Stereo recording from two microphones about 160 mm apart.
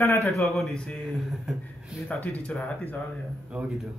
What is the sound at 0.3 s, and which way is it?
Speech, centre (ahead or behind).